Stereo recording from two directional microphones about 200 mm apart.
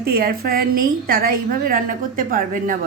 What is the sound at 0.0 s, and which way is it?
A woman's voice, 50° right (ahead or behind).